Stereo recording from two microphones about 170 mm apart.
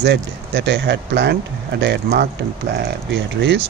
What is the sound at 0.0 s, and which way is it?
Speech, 85° right.